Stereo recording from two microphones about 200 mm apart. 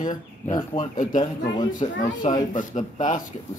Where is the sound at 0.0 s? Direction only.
40° left (ahead or behind).